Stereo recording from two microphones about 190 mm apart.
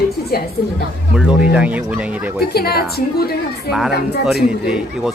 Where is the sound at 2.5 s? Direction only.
55° left (ahead or behind).